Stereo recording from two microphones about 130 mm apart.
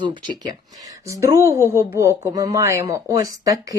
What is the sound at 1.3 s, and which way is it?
A woman's voice, 20° right (ahead or behind).